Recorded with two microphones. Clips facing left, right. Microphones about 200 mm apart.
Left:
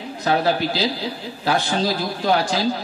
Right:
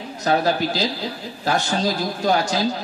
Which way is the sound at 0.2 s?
45° right (ahead or behind).